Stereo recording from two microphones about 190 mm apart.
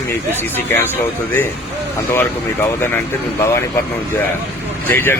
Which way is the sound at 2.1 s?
10° left (ahead or behind).